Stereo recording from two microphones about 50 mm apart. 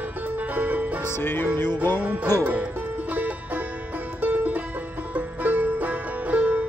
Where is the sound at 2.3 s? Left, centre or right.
Left.